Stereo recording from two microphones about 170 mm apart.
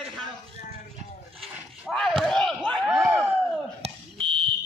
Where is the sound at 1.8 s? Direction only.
5° left (ahead or behind).